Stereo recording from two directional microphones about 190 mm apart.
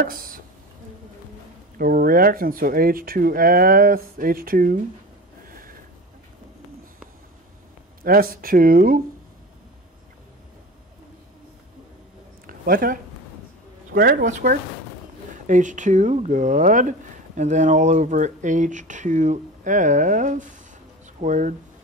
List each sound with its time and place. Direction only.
0.0 s speech: 50° right (ahead or behind)
1.8 s speech: 50° right (ahead or behind)
5.5 s a sound: 50° right (ahead or behind)
8.0 s speech: 50° right (ahead or behind)
12.4 s a sound: 50° right (ahead or behind)
13.9 s speech: 45° right (ahead or behind)